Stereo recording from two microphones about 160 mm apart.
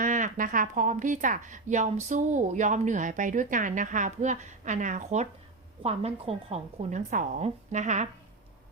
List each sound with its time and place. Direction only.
0.0 s speech: 55° right (ahead or behind)